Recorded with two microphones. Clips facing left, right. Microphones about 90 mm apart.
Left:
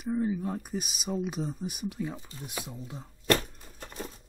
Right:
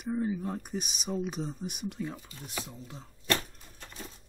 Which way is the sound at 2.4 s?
15° left (ahead or behind).